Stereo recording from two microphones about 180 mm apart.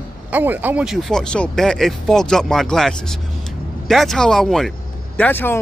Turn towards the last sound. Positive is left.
turn(degrees=10)  # may be behind; listen again after turning